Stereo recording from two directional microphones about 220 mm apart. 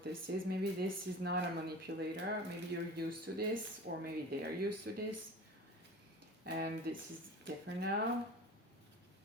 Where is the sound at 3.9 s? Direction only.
45° right (ahead or behind).